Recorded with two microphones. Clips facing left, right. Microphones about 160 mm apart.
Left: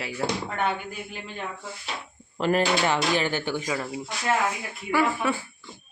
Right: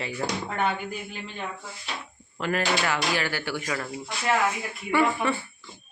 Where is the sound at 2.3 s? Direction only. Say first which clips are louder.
Left 4 dB; 30° left (ahead or behind); by 4.0 s 15° left (ahead or behind).